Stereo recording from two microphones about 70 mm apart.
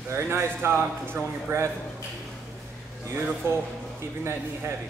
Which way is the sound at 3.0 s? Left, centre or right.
Right.